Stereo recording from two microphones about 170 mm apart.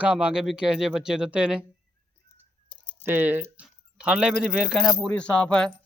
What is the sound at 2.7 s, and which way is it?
Typing, 30° left (ahead or behind).